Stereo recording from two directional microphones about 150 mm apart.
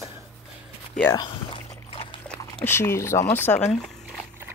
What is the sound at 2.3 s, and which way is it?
Speech, 15° left (ahead or behind).